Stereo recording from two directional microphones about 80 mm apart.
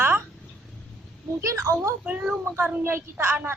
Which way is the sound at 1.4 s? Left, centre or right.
Right.